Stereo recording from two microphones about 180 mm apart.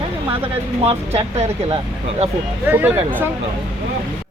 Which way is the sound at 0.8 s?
35° right (ahead or behind).